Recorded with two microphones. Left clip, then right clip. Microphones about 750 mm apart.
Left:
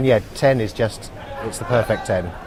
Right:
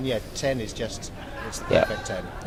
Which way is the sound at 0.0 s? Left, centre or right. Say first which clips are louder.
Left 11 dB; left.